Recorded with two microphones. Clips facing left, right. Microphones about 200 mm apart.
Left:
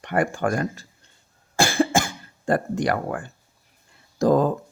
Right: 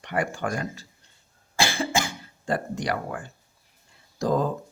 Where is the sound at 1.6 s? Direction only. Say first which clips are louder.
Left 5 dB; 50° left (ahead or behind).